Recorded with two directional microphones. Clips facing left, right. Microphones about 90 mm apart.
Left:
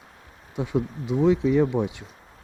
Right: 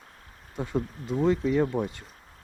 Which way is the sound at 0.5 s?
5° left (ahead or behind).